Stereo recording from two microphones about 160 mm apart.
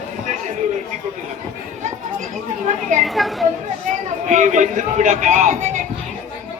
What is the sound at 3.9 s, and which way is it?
A man's voice, 50° right (ahead or behind).